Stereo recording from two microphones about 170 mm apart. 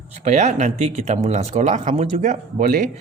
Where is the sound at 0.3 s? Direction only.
40° right (ahead or behind).